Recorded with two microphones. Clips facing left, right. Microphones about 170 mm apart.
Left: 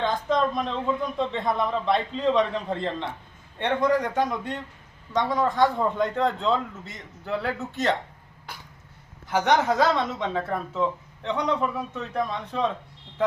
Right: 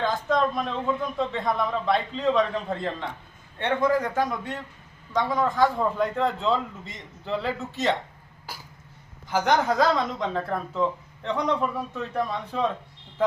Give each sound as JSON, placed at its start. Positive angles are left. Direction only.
{"t": 0.0, "sound": "a man's voice", "side_deg": -5}